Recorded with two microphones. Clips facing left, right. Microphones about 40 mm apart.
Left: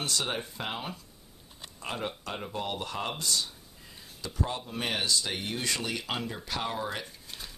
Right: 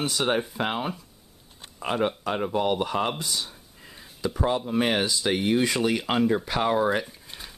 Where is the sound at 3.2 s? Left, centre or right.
Centre.